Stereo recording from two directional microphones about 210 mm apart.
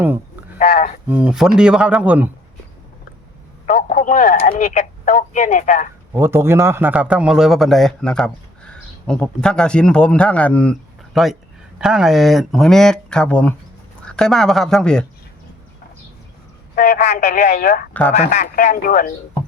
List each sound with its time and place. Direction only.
0.0 s sheep: 10° right (ahead or behind)
0.6 s a sound: 40° left (ahead or behind)
1.0 s a man's voice: 5° right (ahead or behind)
3.7 s speech: 40° left (ahead or behind)
6.1 s a man's voice: 10° right (ahead or behind)
16.7 s speech: 35° left (ahead or behind)